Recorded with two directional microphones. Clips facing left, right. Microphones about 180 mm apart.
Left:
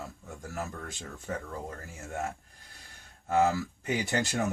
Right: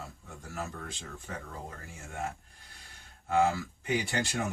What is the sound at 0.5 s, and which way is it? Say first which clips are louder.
Speech: left 1 dB; 45° left (ahead or behind).